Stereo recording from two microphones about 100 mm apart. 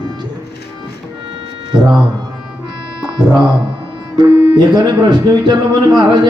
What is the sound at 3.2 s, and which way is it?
Music, 45° right (ahead or behind).